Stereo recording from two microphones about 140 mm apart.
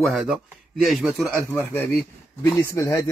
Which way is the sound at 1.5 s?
15° left (ahead or behind).